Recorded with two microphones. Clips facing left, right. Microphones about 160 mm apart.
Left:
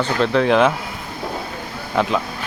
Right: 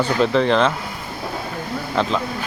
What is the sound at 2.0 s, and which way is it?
Speech, 5° left (ahead or behind).